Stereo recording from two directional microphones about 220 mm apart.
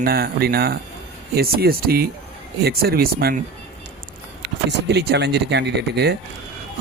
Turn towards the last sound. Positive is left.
turn(degrees=-50)  # may be behind; listen again after turning